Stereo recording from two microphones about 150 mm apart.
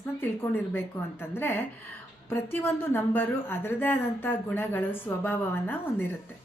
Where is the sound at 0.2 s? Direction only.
15° left (ahead or behind).